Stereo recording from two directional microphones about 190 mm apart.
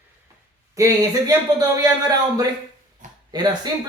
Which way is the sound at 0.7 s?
15° right (ahead or behind).